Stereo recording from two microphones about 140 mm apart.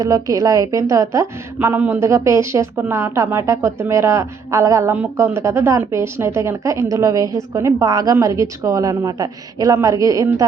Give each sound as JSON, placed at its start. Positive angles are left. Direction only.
{"t": 0.0, "sound": "a woman's voice", "side_deg": -25}